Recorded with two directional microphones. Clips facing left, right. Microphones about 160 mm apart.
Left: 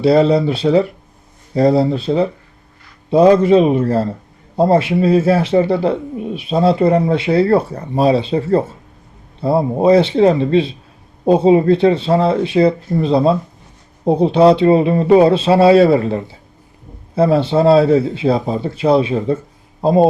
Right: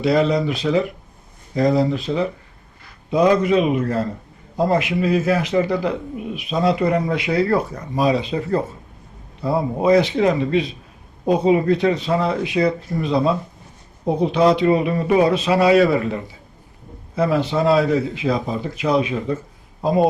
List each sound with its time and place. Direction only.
0.0 s a man's voice: 30° left (ahead or behind)